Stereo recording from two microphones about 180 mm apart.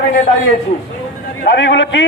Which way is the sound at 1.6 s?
85° left.